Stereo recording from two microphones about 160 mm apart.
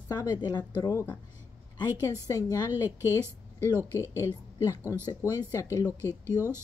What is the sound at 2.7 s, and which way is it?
A woman's voice, 15° right (ahead or behind).